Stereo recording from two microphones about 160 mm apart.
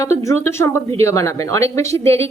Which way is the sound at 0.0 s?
20° left (ahead or behind).